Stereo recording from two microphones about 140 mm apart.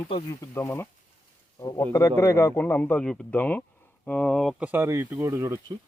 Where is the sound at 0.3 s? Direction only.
20° left (ahead or behind).